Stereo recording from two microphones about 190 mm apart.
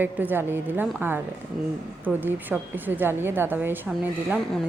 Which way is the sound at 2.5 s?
10° right (ahead or behind).